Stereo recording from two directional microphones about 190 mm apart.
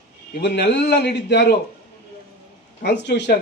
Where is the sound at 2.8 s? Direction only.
65° left (ahead or behind).